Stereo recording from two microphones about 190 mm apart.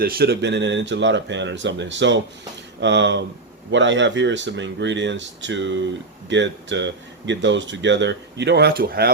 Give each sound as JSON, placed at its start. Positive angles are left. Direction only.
{"t": 0.0, "sound": "speech", "side_deg": -55}